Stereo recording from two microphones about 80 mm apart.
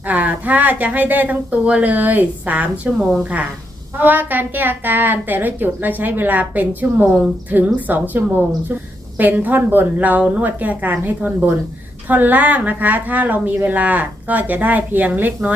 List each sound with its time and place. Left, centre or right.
0.1 s a woman's voice: centre
3.9 s a woman's voice: right